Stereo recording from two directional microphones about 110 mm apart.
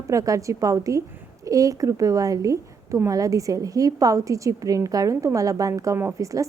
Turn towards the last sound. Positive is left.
turn(degrees=-30)  # may be behind; listen again after turning